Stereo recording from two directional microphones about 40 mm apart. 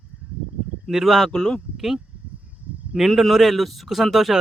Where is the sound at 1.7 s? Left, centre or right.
Centre.